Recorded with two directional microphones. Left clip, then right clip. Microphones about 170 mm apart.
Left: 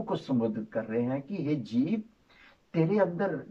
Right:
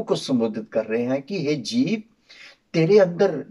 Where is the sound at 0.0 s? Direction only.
15° right (ahead or behind).